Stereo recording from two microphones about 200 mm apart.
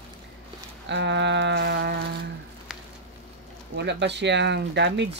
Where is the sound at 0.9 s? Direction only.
60° right (ahead or behind).